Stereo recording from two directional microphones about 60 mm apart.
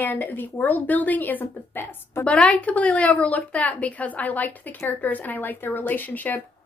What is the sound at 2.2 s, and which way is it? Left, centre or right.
A woman's voice, left.